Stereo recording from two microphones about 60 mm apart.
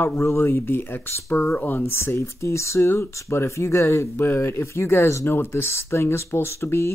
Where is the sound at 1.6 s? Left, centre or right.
Left.